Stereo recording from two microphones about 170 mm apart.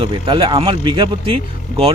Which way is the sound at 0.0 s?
30° right (ahead or behind).